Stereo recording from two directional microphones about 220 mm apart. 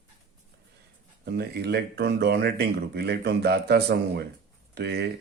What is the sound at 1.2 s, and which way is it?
Speech, 45° right (ahead or behind).